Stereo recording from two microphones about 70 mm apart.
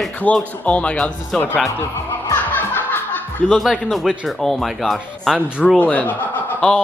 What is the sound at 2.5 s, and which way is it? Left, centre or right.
Music, left.